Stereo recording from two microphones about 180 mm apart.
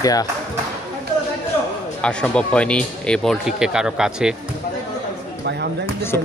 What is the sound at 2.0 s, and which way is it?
Speech, 5° left (ahead or behind).